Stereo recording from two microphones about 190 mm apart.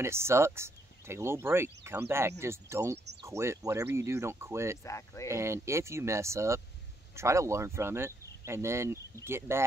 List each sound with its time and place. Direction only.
0.0 s speech: 15° right (ahead or behind)
4.8 s speech: 15° left (ahead or behind)
5.3 s speech: 15° right (ahead or behind)